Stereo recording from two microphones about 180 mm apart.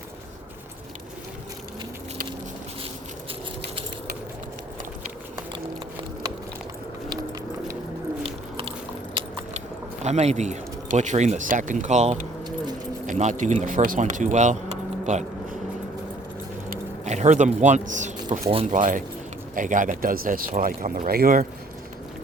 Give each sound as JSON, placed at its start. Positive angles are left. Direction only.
{"t": 8.2, "sound": "a sound", "side_deg": -30}
{"t": 10.0, "sound": "speech", "side_deg": -40}
{"t": 17.1, "sound": "speech", "side_deg": -40}
{"t": 18.2, "sound": "speech", "side_deg": -25}
{"t": 18.7, "sound": "speech", "side_deg": -45}